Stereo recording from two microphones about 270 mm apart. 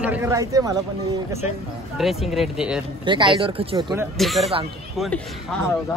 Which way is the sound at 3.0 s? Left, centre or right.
Centre.